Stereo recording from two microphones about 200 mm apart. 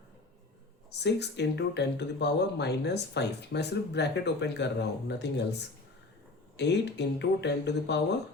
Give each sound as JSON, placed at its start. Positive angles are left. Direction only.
{"t": 0.9, "sound": "speech", "side_deg": 55}